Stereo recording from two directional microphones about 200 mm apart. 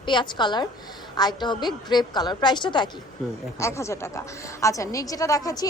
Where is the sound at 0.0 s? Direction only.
25° left (ahead or behind).